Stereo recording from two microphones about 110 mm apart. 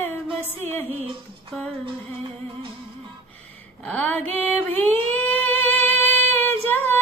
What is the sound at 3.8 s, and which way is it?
Music, 15° left (ahead or behind).